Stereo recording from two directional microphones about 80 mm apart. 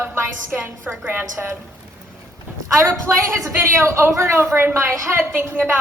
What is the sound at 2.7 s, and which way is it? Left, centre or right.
A woman's voice, right.